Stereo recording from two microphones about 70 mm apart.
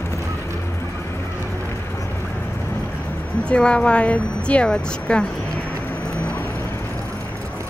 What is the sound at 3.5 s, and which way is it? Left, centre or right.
Speech, centre.